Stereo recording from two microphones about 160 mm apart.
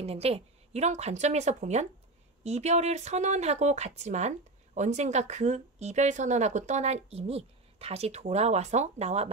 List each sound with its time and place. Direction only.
0.0 s a woman's voice: 40° right (ahead or behind)